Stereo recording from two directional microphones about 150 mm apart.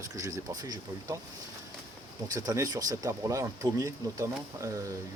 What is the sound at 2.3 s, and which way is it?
Speech, 25° right (ahead or behind).